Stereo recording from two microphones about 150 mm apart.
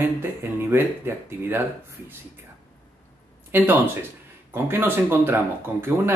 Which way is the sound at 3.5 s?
15° right (ahead or behind).